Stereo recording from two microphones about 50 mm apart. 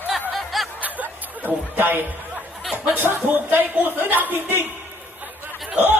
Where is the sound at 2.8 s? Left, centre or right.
Right.